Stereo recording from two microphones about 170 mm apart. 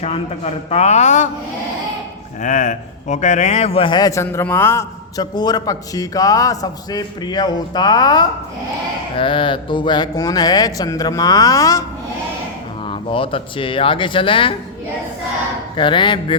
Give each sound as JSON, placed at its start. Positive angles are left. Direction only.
{"t": 0.0, "sound": "speech", "side_deg": 40}
{"t": 2.4, "sound": "speech", "side_deg": 45}
{"t": 12.8, "sound": "speech", "side_deg": 30}
{"t": 15.7, "sound": "speech", "side_deg": 30}